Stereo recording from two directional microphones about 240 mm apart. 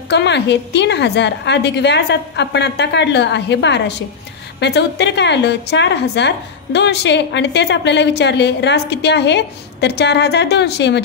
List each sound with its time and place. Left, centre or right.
0.1 s a woman's voice: left